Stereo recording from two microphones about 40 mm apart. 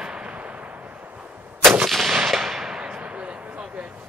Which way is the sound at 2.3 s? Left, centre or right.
Centre.